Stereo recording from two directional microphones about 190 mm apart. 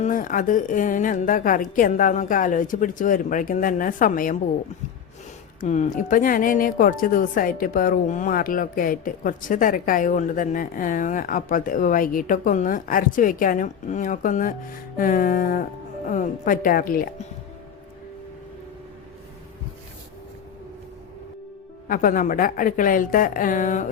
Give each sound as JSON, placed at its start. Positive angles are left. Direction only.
{"t": 0.0, "sound": "speech", "side_deg": 45}
{"t": 5.5, "sound": "speech", "side_deg": 40}
{"t": 21.8, "sound": "speech", "side_deg": 45}